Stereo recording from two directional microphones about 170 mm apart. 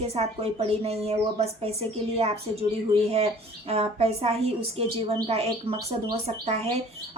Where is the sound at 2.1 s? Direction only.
35° right (ahead or behind).